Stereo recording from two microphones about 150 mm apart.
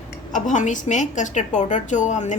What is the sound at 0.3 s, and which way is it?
A woman's voice, 55° left (ahead or behind).